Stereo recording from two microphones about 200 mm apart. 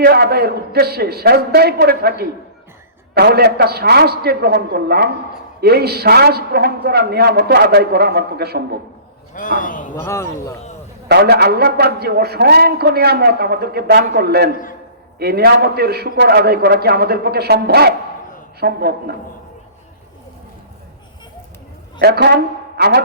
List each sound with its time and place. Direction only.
0.0 s a man's voice: 50° right (ahead or behind)
9.3 s a man's voice: 40° left (ahead or behind)
10.0 s speech: 15° left (ahead or behind)
11.1 s a man's voice: 55° right (ahead or behind)
22.0 s speech: 55° right (ahead or behind)